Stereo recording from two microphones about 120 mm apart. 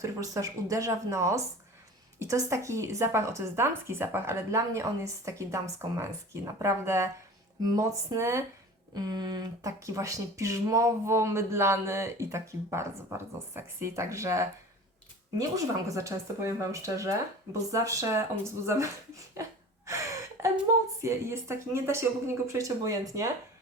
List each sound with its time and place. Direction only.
0.0 s speech: 25° right (ahead or behind)
19.3 s a sound: 25° right (ahead or behind)
21.0 s speech: 25° right (ahead or behind)